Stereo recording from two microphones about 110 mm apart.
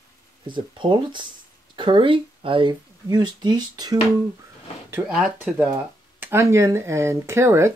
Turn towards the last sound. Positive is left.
turn(degrees=-25)  # may be behind; listen again after turning